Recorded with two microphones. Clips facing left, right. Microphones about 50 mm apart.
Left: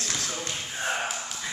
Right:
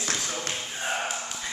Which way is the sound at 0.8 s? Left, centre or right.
Centre.